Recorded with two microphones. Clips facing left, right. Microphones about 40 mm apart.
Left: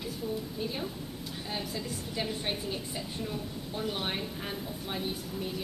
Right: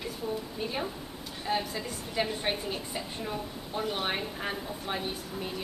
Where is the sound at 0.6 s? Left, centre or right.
Right.